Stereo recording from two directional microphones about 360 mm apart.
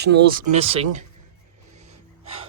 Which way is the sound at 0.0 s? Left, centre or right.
Right.